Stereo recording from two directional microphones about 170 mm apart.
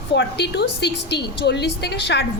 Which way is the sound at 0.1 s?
90° left.